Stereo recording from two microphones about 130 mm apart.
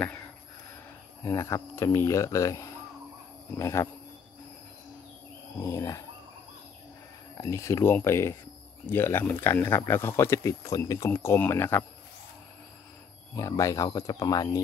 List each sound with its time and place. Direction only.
1.2 s speech: 25° left (ahead or behind)
5.6 s speech: 25° left (ahead or behind)
7.3 s speech: 25° left (ahead or behind)
13.3 s speech: 25° left (ahead or behind)